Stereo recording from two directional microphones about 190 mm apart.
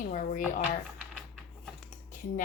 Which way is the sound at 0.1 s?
45° left (ahead or behind).